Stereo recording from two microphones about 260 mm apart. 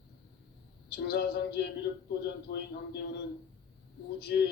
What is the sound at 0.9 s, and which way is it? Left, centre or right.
Speech, left.